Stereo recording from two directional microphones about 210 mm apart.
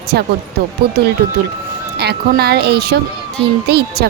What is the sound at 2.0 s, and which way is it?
Speech, 50° right (ahead or behind).